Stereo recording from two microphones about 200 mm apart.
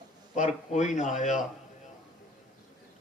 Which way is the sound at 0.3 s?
35° left (ahead or behind).